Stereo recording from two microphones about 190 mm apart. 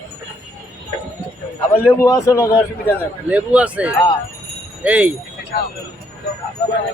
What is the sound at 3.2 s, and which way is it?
Speech, 5° right (ahead or behind).